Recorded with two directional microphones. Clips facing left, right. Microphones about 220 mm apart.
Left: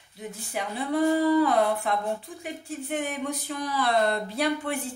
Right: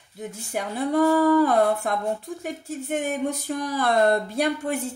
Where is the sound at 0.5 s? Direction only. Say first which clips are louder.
Right 4 dB; 45° right (ahead or behind).